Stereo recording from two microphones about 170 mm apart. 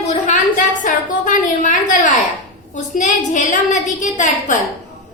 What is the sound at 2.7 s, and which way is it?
A woman's voice, 45° left (ahead or behind).